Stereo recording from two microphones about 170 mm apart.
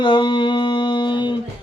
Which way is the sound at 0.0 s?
30° left (ahead or behind).